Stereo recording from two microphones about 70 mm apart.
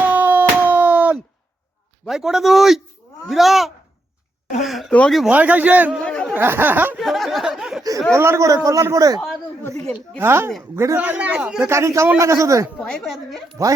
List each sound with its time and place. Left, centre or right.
0.0 s a sound: right
2.0 s a man's voice: centre
5.3 s a man's voice: right
6.0 s a sound: centre
6.3 s a man's voice: right
7.0 s speech: centre
8.1 s a man's voice: right
8.4 s speech: right
10.2 s a man's voice: right
10.9 s a man's voice: right
11.6 s a man's voice: right
12.7 s a woman's voice: centre
13.6 s a man's voice: right